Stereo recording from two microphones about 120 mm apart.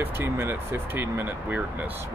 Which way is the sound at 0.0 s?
20° right (ahead or behind).